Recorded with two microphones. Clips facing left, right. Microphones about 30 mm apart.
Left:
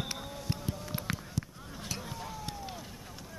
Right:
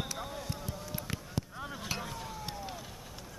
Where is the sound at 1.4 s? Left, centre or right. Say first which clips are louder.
Right 2 dB; right.